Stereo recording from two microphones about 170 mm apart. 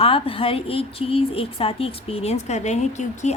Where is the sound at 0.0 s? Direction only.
35° left (ahead or behind).